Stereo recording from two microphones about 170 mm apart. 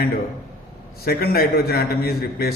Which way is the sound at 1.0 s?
65° left (ahead or behind).